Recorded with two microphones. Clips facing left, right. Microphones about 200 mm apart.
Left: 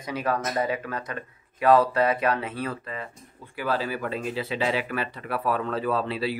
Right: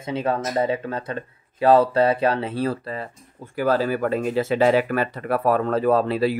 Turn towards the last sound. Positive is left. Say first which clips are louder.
# right 7 dB
turn(degrees=-45)  # may be behind; listen again after turning